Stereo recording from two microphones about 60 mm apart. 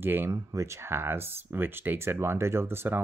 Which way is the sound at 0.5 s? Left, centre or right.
Right.